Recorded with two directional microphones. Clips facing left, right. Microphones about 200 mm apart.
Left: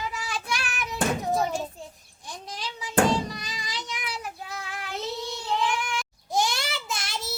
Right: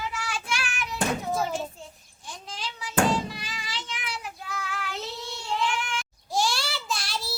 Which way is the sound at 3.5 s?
15° left (ahead or behind).